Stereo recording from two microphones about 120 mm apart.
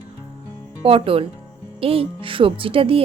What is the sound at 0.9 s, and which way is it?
Speech, 50° right (ahead or behind).